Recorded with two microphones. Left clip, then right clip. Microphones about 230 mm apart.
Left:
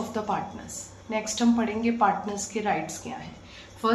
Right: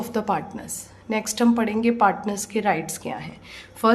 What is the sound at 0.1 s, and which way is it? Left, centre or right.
A woman's voice, right.